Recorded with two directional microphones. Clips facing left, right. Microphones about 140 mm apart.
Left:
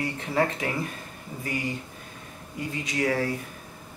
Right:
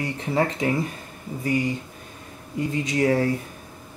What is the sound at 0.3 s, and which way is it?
Speech, 25° right (ahead or behind).